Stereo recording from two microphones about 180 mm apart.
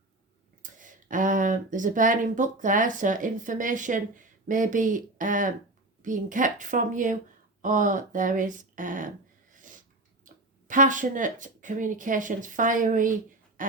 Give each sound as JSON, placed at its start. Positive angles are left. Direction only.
{"t": 0.6, "sound": "speech", "side_deg": -45}
{"t": 9.5, "sound": "a sound", "side_deg": -45}
{"t": 10.2, "sound": "speech", "side_deg": -45}